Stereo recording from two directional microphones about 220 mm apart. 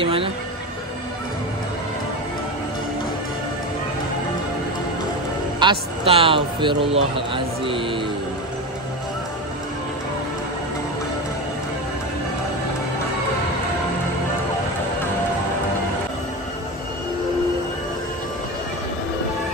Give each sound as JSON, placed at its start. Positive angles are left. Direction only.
{"t": 0.0, "sound": "music", "side_deg": -25}
{"t": 5.6, "sound": "a man's voice", "side_deg": -25}